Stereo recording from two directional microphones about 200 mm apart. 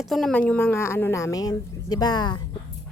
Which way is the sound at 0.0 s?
Centre (ahead or behind).